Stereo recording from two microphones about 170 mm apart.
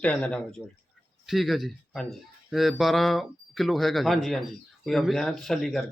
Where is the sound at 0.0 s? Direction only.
5° left (ahead or behind).